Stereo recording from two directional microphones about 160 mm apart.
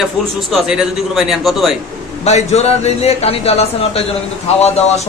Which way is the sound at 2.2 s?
45° left (ahead or behind).